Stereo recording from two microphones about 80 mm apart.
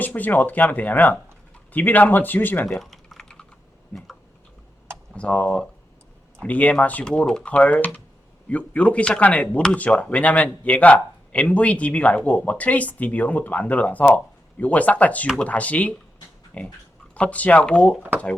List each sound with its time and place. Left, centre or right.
0.0 s speech: left
2.7 s typing: centre
3.9 s a sound: centre
5.1 s speech: centre